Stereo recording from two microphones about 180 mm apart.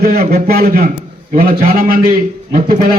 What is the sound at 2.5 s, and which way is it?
Speech, 50° right (ahead or behind).